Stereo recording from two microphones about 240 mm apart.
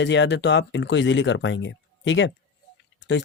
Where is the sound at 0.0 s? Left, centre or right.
Left.